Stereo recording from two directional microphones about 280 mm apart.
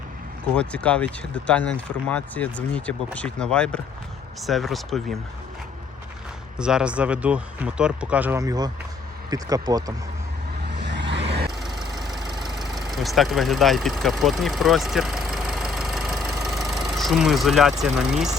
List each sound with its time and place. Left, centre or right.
0.5 s speech: centre
6.6 s speech: centre
10.8 s vehicle: right
11.6 s vehicle: centre